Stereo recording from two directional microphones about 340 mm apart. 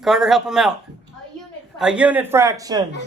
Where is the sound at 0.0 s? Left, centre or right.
Centre.